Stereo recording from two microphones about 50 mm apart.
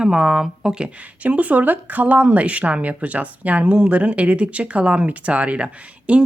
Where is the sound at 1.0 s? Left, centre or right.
Right.